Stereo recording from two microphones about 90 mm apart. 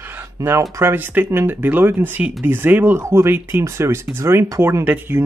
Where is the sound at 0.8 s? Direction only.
25° right (ahead or behind).